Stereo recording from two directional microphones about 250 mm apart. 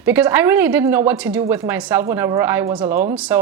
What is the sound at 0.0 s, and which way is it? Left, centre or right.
Speech, centre.